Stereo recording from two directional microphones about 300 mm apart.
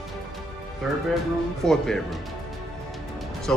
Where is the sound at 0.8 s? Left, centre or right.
Centre.